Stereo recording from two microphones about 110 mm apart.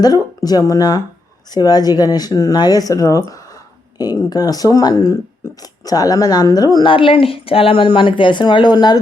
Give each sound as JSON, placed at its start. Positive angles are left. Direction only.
{"t": 0.0, "sound": "speech", "side_deg": 35}
{"t": 6.8, "sound": "a woman's voice", "side_deg": 50}